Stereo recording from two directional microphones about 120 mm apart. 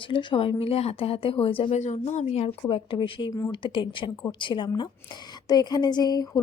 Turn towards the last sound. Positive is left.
turn(degrees=30)  # may be behind; listen again after turning